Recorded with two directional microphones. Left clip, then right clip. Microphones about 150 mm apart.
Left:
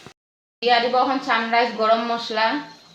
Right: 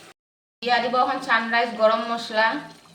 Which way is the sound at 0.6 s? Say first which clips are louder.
Left 3 dB; 45° left (ahead or behind).